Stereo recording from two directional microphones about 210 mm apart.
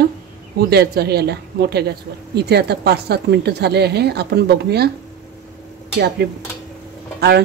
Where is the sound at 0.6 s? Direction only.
50° right (ahead or behind).